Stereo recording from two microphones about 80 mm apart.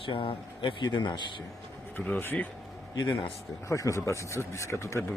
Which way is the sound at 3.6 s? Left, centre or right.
Left.